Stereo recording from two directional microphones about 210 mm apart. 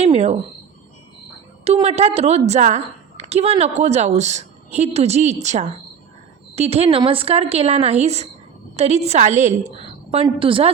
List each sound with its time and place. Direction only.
0.0 s a woman's voice: 30° right (ahead or behind)
1.6 s a woman's voice: 30° right (ahead or behind)